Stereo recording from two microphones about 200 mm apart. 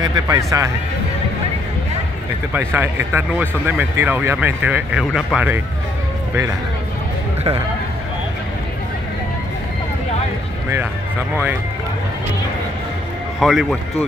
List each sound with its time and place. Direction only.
0.0 s speech: 20° right (ahead or behind)
2.5 s speech: 10° right (ahead or behind)
13.4 s speech: centre (ahead or behind)